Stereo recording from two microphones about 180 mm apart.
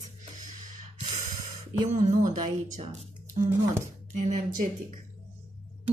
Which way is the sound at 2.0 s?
45° right (ahead or behind).